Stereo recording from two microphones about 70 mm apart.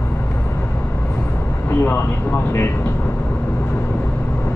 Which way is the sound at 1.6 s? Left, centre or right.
Left.